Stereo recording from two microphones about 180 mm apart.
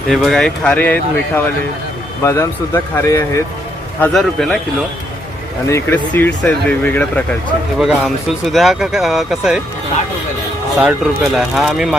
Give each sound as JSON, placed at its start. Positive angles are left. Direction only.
{"t": 0.1, "sound": "speech", "side_deg": 0}
{"t": 2.2, "sound": "speech", "side_deg": 15}
{"t": 4.0, "sound": "speech", "side_deg": 0}
{"t": 5.6, "sound": "speech", "side_deg": 15}
{"t": 10.8, "sound": "speech", "side_deg": -5}